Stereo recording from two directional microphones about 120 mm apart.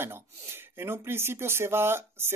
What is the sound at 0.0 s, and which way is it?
Speech, 20° right (ahead or behind).